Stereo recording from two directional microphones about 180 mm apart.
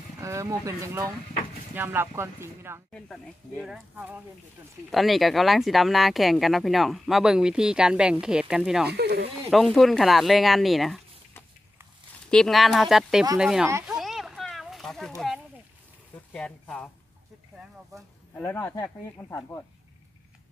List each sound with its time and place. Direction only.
0.2 s speech: 15° right (ahead or behind)
2.9 s speech: 5° left (ahead or behind)
3.9 s speech: 10° right (ahead or behind)
8.9 s speech: 65° right (ahead or behind)
9.5 s speech: centre (ahead or behind)
12.3 s speech: centre (ahead or behind)
13.8 s a sound: centre (ahead or behind)
16.3 s speech: 5° left (ahead or behind)
17.9 s speech: 20° right (ahead or behind)
18.3 s speech: 10° left (ahead or behind)